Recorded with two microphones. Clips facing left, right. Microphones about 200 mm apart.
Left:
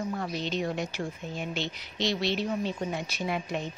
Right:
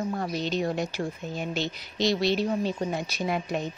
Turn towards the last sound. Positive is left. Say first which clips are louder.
# right 3 dB
turn(degrees=-40)  # may be behind; listen again after turning